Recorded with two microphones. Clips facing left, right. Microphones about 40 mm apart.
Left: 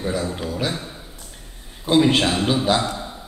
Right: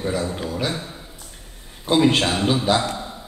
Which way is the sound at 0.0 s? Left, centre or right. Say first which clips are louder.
Even; centre.